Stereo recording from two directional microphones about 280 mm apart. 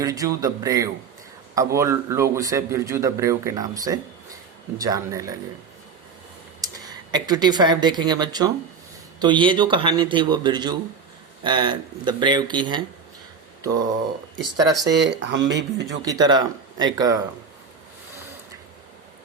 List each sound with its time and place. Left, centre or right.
0.0 s a man's voice: centre
6.6 s a man's voice: centre
14.5 s a man's voice: centre
15.2 s speech: right
16.0 s a man's voice: centre